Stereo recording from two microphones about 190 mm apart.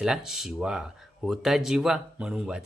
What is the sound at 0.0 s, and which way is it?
Speech, 5° right (ahead or behind).